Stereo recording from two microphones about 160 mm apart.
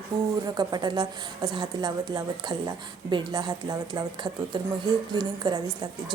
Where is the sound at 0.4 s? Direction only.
25° right (ahead or behind).